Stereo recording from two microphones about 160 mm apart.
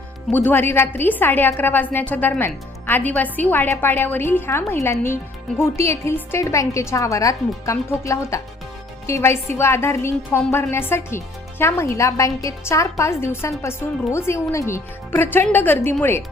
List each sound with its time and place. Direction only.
0.3 s a woman's voice: 10° left (ahead or behind)